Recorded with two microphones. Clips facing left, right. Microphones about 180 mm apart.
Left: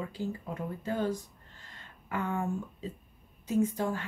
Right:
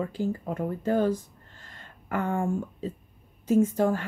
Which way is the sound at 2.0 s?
50° right (ahead or behind).